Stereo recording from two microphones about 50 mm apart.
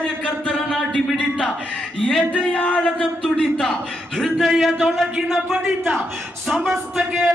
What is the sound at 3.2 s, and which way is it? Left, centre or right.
Speech, centre.